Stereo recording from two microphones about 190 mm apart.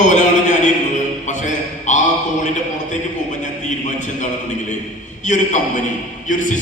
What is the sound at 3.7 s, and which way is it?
Speech, 40° left (ahead or behind).